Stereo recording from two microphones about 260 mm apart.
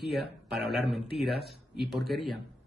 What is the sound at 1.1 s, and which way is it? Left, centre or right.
Speech, right.